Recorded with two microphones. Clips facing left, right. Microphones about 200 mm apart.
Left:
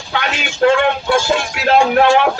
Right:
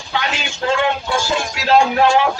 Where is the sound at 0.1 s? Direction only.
60° left (ahead or behind).